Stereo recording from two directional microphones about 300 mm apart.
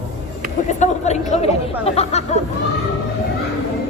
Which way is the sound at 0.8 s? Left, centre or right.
Left.